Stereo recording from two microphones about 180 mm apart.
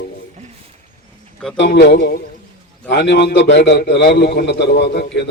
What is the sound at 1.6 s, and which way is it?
A man's voice, 75° left (ahead or behind).